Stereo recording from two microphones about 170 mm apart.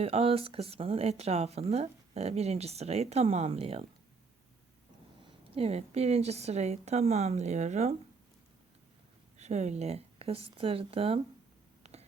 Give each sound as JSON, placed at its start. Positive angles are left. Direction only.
{"t": 0.0, "sound": "speech", "side_deg": -35}
{"t": 5.5, "sound": "speech", "side_deg": -35}
{"t": 9.4, "sound": "speech", "side_deg": -40}
{"t": 11.8, "sound": "a sound", "side_deg": -40}